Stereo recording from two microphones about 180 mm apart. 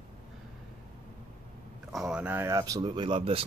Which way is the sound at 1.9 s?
5° right (ahead or behind).